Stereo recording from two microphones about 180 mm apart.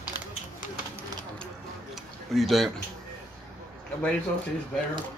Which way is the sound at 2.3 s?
Centre (ahead or behind).